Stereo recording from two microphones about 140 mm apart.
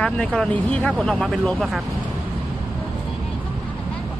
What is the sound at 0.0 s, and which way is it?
Speech, 5° left (ahead or behind).